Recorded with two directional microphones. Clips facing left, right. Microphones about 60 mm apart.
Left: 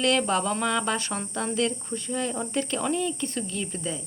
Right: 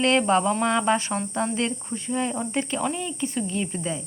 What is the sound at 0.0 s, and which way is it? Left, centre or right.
Speech, right.